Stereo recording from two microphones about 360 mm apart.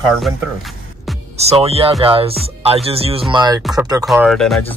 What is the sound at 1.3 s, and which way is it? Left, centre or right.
Speech, centre.